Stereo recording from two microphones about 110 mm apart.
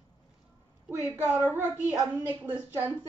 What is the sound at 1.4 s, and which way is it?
A woman's voice, 20° right (ahead or behind).